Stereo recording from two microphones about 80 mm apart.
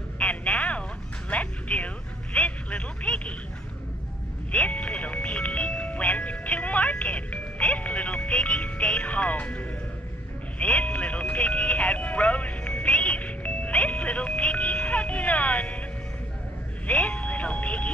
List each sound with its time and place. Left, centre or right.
0.2 s telephone: centre
1.3 s music: centre
2.3 s a sound: centre
4.5 s music: centre
10.6 s speech: centre
16.8 s speech: centre